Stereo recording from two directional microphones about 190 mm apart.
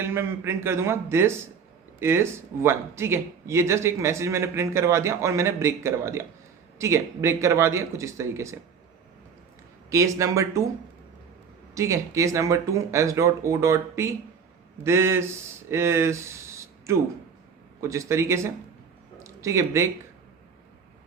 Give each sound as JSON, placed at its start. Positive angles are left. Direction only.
{"t": 0.0, "sound": "speech", "side_deg": -15}
{"t": 9.9, "sound": "speech", "side_deg": -15}
{"t": 11.7, "sound": "speech", "side_deg": -15}